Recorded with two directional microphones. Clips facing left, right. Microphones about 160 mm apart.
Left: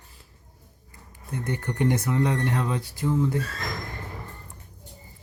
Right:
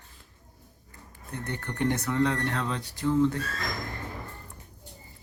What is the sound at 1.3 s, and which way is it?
Speech, 10° left (ahead or behind).